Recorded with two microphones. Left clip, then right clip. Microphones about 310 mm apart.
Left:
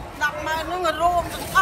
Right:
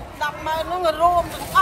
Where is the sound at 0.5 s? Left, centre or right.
Centre.